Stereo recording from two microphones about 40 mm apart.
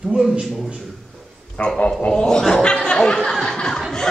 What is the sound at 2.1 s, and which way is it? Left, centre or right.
Speech, centre.